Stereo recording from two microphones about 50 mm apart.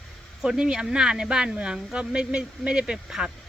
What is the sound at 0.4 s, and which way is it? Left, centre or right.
Speech, centre.